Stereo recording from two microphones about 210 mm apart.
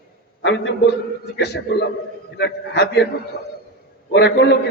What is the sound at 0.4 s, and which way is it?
Speech, 60° left (ahead or behind).